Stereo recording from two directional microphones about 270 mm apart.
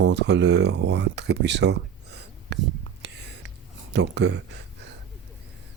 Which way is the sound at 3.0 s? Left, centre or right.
Right.